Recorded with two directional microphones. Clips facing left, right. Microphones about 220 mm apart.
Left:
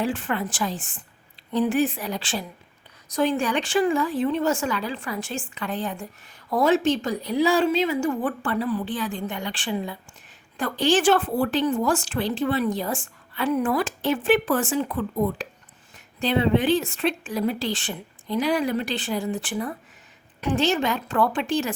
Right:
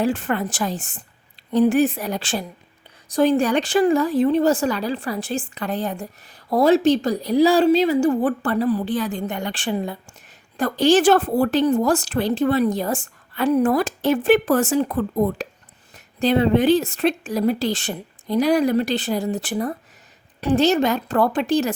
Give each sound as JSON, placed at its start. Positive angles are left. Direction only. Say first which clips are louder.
{"t": 0.0, "sound": "a woman's voice", "louder": "right 4 dB", "side_deg": -40}